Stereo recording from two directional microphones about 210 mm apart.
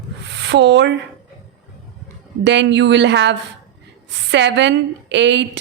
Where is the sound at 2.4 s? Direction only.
55° right (ahead or behind).